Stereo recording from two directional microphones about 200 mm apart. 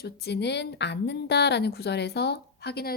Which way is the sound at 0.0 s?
55° left (ahead or behind).